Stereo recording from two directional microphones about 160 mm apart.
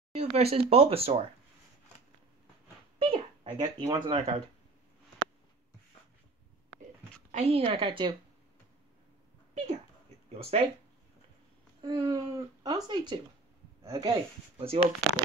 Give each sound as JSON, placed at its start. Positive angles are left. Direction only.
{"t": 0.1, "sound": "speech", "side_deg": -40}
{"t": 3.0, "sound": "a sound", "side_deg": -30}
{"t": 3.8, "sound": "speech", "side_deg": -25}
{"t": 7.2, "sound": "speech", "side_deg": -45}
{"t": 10.5, "sound": "speech", "side_deg": -40}
{"t": 11.8, "sound": "speech", "side_deg": -30}
{"t": 14.6, "sound": "speech", "side_deg": -35}